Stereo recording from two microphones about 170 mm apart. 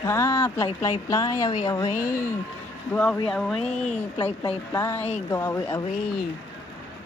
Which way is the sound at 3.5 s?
40° left (ahead or behind).